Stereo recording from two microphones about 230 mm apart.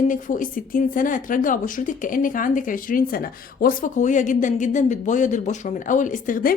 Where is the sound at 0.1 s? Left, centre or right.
Left.